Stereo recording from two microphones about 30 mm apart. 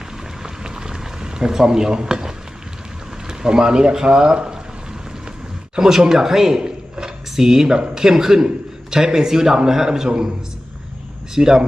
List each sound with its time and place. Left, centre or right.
0.4 s a sound: right
3.2 s speech: right
5.8 s a man's voice: centre
6.6 s drawer open or close: right
7.3 s a man's voice: centre
11.3 s a man's voice: centre